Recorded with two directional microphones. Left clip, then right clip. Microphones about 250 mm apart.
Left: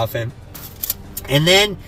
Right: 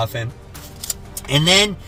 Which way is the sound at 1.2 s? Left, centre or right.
Centre.